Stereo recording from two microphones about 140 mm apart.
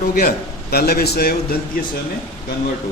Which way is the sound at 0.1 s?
90° left.